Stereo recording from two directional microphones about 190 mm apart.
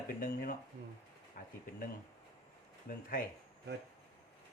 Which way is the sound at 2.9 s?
50° left (ahead or behind).